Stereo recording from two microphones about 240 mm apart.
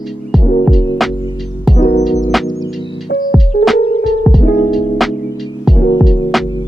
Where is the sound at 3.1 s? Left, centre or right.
Left.